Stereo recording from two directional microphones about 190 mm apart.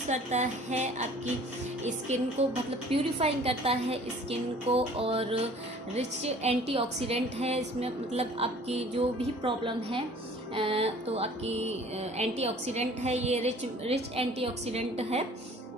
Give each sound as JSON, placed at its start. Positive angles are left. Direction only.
{"t": 0.1, "sound": "mantra", "side_deg": -35}
{"t": 2.4, "sound": "mantra", "side_deg": -35}